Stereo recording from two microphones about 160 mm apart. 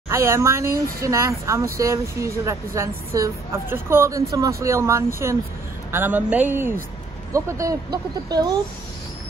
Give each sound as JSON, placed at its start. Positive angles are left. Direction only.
{"t": 0.1, "sound": "speech", "side_deg": -15}